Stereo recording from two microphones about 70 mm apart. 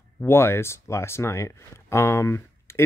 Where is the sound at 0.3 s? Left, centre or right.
Left.